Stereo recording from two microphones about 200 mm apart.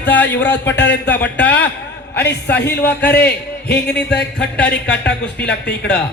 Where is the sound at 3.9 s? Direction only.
55° left (ahead or behind).